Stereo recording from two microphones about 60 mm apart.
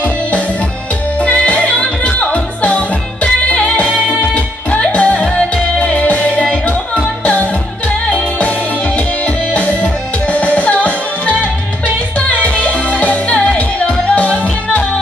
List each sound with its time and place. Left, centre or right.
1.2 s music: centre